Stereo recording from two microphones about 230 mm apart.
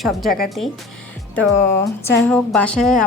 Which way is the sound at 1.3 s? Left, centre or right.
Centre.